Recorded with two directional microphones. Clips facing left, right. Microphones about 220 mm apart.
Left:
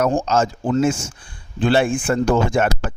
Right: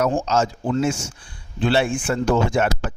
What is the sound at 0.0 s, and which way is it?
A man's voice, 50° left (ahead or behind).